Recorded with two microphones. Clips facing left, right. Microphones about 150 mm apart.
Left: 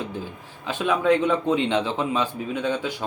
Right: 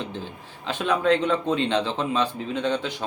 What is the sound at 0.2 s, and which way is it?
Speech, 15° left (ahead or behind).